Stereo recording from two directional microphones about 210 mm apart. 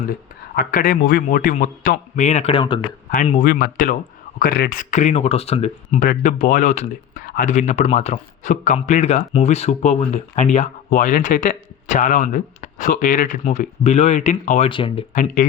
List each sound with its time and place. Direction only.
0.5 s speech: 45° left (ahead or behind); by 2.8 s 20° left (ahead or behind)
3.2 s speech: 40° left (ahead or behind)
15.1 s speech: 40° left (ahead or behind)